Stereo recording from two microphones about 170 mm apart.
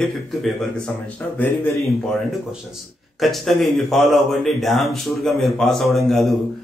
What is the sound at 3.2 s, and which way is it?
Speech, centre (ahead or behind).